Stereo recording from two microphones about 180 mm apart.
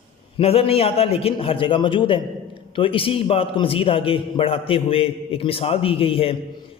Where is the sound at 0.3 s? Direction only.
30° left (ahead or behind).